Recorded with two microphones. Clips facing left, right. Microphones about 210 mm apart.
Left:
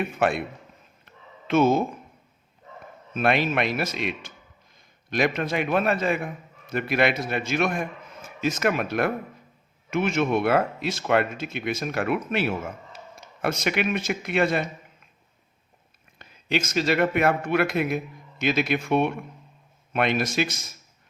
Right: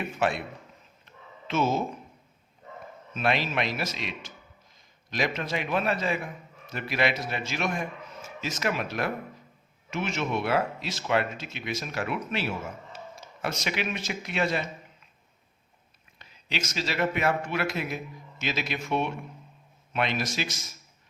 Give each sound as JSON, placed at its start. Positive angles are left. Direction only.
{"t": 0.2, "sound": "a man's voice", "side_deg": 55}
{"t": 1.5, "sound": "a man's voice", "side_deg": 55}
{"t": 3.2, "sound": "a man's voice", "side_deg": 55}
{"t": 16.1, "sound": "a man's voice", "side_deg": 50}